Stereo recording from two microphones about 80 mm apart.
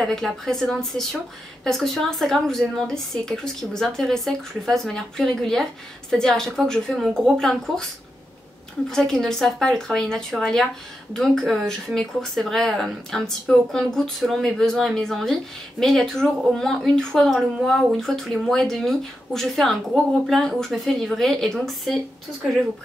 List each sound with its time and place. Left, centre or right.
0.0 s a woman's voice: centre
8.9 s a woman's voice: centre